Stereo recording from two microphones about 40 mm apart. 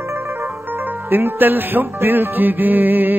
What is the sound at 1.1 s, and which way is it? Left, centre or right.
Music, right.